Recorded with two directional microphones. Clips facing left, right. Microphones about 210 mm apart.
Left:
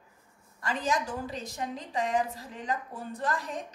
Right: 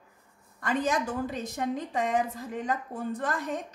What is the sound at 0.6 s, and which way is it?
A woman's voice, 50° right (ahead or behind).